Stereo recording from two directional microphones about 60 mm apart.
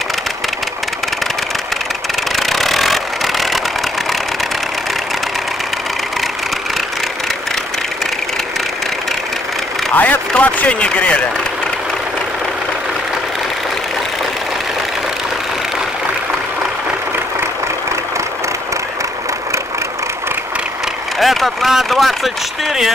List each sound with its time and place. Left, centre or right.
2.3 s vehicle: centre
9.9 s speech: left
21.2 s speech: centre